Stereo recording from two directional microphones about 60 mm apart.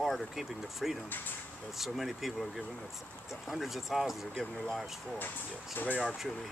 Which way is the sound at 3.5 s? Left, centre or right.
Centre.